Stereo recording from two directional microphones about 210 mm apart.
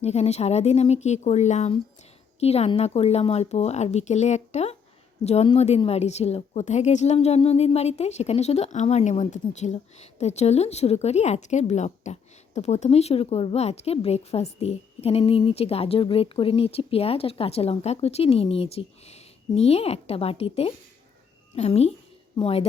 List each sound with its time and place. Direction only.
0.0 s a woman's voice: 30° left (ahead or behind)